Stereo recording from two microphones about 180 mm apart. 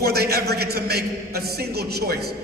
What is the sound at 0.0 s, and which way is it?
A man's voice, 60° right (ahead or behind).